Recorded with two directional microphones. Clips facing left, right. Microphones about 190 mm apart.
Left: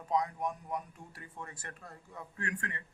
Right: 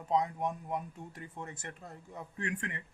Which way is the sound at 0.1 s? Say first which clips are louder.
Right 1 dB; 25° right (ahead or behind).